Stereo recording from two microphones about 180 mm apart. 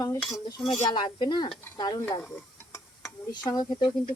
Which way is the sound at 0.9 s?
25° left (ahead or behind).